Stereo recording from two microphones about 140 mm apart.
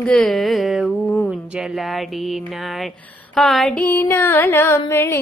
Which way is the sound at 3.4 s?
Centre (ahead or behind).